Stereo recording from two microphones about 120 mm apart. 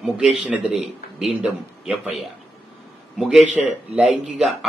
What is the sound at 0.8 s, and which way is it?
Speech, 60° right (ahead or behind).